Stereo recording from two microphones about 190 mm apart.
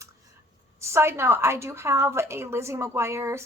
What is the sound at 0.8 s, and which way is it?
A woman's voice, 15° right (ahead or behind).